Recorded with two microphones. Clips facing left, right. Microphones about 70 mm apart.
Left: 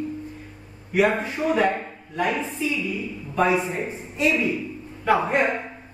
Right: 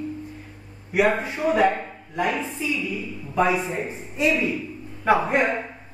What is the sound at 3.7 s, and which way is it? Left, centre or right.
Speech, right.